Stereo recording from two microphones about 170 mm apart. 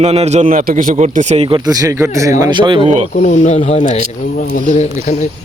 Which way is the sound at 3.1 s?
40° left (ahead or behind).